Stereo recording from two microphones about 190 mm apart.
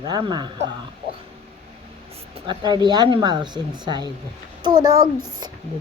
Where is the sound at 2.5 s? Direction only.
20° right (ahead or behind).